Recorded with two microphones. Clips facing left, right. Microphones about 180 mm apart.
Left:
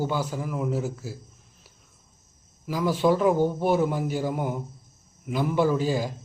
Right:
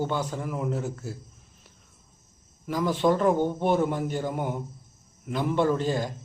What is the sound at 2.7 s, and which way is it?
A man's voice, 5° left (ahead or behind).